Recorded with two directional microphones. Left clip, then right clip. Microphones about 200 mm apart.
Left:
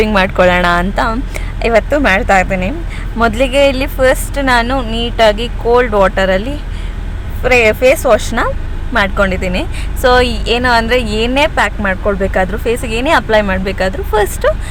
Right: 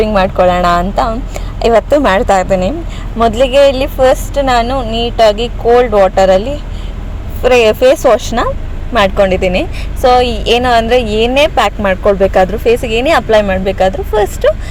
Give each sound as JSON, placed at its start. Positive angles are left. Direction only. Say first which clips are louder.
{"t": 0.0, "sound": "a woman's voice", "louder": "right 1 dB", "side_deg": 10}
{"t": 7.4, "sound": "a woman's voice", "louder": "right 2 dB", "side_deg": -20}
{"t": 10.0, "sound": "a woman's voice", "louder": "right 2 dB", "side_deg": 0}